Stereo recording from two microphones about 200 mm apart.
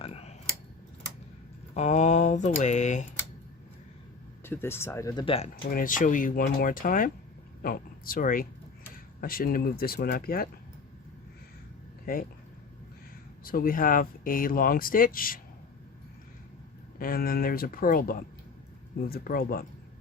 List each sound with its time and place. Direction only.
0.0 s a sound: 30° left (ahead or behind)
1.7 s speech: 35° left (ahead or behind)
4.4 s speech: 10° left (ahead or behind); by 5.5 s 25° left (ahead or behind)
5.7 s speech: 40° left (ahead or behind)
12.1 s speech: 45° left (ahead or behind)
13.4 s speech: 45° left (ahead or behind)
17.0 s speech: 45° left (ahead or behind)